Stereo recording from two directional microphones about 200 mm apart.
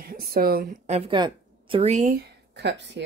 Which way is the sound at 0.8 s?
30° right (ahead or behind).